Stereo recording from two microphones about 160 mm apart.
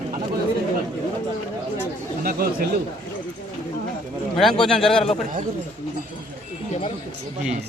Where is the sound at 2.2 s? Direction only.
60° right (ahead or behind).